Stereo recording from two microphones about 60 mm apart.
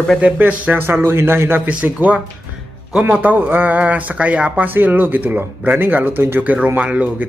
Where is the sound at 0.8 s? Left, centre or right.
Right.